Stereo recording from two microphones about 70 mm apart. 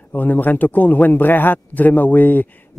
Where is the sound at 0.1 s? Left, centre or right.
Left.